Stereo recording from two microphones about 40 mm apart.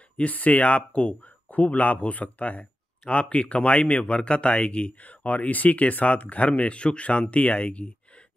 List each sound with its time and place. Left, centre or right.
0.2 s speech: left